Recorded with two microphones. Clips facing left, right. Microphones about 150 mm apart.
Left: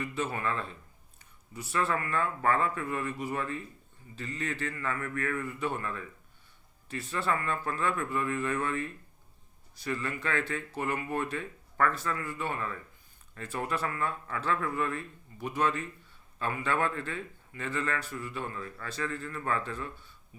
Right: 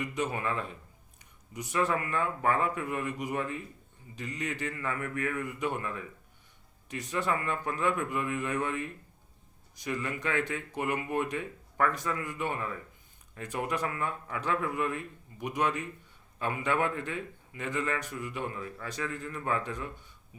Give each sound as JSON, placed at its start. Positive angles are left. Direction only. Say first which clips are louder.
{"t": 0.0, "sound": "a man's voice", "louder": "right 1 dB", "side_deg": -15}